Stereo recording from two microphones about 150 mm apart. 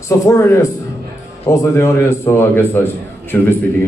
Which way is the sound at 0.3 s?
20° left (ahead or behind).